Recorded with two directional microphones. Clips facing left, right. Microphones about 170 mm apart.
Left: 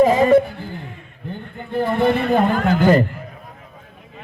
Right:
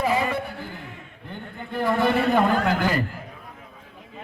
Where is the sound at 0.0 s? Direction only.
40° left (ahead or behind).